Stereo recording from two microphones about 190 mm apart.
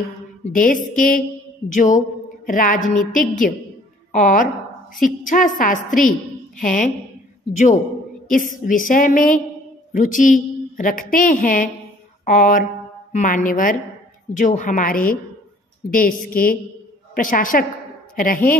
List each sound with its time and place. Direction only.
0.5 s a woman's voice: 45° left (ahead or behind)